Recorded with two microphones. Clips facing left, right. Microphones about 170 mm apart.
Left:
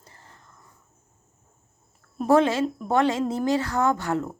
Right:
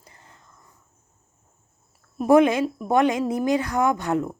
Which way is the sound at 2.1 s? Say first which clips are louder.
Right 3 dB; 15° right (ahead or behind).